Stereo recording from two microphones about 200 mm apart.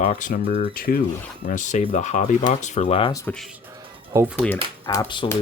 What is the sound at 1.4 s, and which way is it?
Speech, 40° left (ahead or behind).